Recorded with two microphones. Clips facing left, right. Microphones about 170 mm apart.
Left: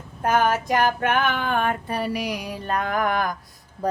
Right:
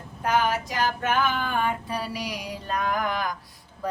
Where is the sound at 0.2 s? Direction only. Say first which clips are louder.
Left 3 dB; 50° left (ahead or behind).